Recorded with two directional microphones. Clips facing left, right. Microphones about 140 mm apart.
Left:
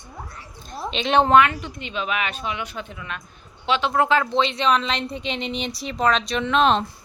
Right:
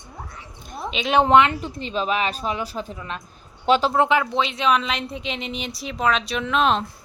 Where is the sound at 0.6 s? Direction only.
10° right (ahead or behind).